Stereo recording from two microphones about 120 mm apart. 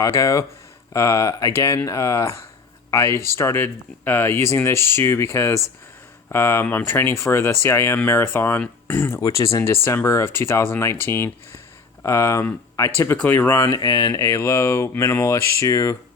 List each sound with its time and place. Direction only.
0.0 s speech: 25° left (ahead or behind)